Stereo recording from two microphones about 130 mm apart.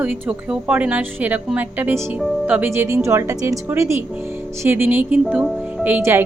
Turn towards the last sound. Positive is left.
turn(degrees=-15)  # may be behind; listen again after turning